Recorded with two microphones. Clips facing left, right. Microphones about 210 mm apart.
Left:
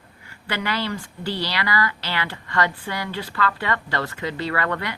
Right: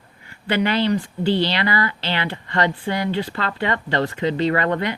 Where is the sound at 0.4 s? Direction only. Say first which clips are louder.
Right 7 dB; 20° right (ahead or behind).